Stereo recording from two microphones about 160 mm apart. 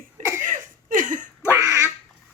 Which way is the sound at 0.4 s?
55° right (ahead or behind).